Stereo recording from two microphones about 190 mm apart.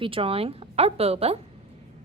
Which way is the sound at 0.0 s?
30° right (ahead or behind).